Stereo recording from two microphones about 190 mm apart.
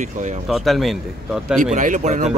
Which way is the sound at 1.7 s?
40° right (ahead or behind).